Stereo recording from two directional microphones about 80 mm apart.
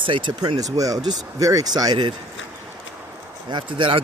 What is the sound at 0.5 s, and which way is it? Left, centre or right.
Speech, right.